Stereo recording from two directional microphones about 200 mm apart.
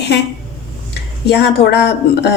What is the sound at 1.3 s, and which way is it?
Speech, 55° left (ahead or behind).